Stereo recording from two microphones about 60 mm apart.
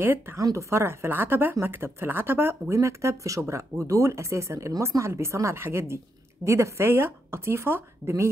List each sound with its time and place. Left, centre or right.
0.0 s speech: right
0.4 s speech: right
0.7 s speech: right
2.8 s speech: right